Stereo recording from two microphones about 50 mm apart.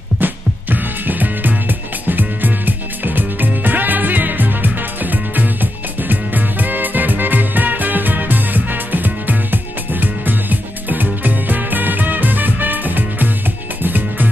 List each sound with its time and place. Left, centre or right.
0.2 s music: right